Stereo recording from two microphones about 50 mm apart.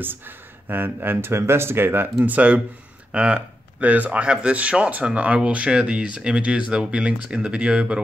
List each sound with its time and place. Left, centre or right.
0.7 s speech: right
2.2 s speech: right